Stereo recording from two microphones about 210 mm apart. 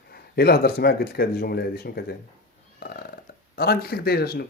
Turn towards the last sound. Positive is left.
turn(degrees=50)  # may be behind; listen again after turning